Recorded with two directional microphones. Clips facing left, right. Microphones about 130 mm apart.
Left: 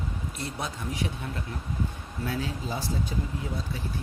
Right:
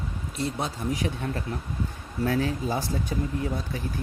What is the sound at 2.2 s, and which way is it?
Speech, 50° right (ahead or behind).